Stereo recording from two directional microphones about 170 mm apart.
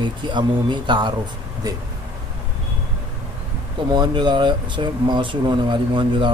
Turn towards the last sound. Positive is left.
turn(degrees=-30)  # may be behind; listen again after turning